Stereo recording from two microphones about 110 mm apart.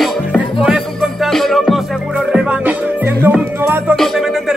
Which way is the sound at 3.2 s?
20° right (ahead or behind).